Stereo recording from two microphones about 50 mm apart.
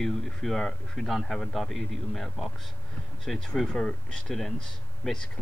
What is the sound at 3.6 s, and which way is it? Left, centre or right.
Speech, centre.